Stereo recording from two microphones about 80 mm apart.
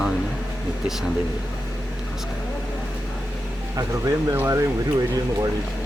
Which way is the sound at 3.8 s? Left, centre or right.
Right.